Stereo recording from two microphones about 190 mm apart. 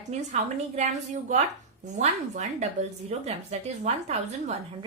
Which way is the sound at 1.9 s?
40° right (ahead or behind).